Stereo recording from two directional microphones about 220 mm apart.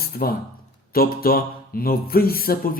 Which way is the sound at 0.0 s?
45° left (ahead or behind).